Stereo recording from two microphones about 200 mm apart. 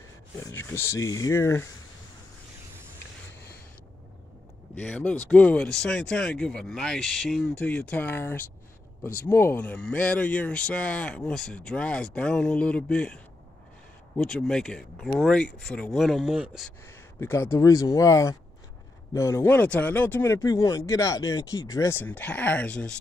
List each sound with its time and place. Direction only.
0.5 s speech: 15° left (ahead or behind)
4.7 s speech: 5° left (ahead or behind)
17.2 s speech: 10° left (ahead or behind)